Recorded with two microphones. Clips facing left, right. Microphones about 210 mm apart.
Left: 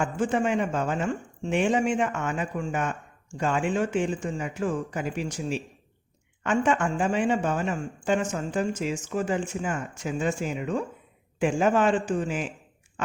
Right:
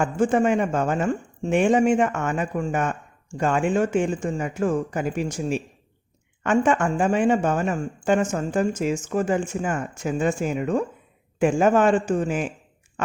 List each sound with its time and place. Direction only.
0.0 s speech: 45° right (ahead or behind)